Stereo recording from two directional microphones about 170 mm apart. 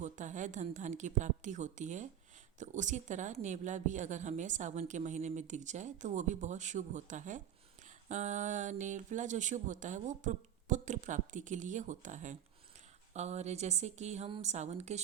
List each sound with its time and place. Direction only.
0.0 s a woman's voice: 45° right (ahead or behind)